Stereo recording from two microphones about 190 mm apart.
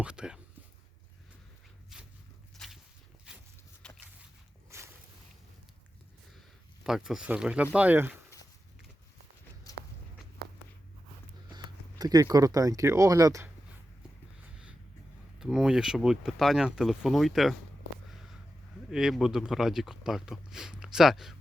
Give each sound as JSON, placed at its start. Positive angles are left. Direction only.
{"t": 0.0, "sound": "speech", "side_deg": -5}
{"t": 3.8, "sound": "walk", "side_deg": 5}
{"t": 4.7, "sound": "a sound", "side_deg": -15}
{"t": 6.8, "sound": "speech", "side_deg": 0}
{"t": 11.5, "sound": "speech", "side_deg": -20}
{"t": 15.4, "sound": "speech", "side_deg": -5}
{"t": 18.9, "sound": "speech", "side_deg": -5}